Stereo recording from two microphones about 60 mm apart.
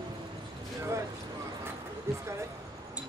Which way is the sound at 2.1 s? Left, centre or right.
Right.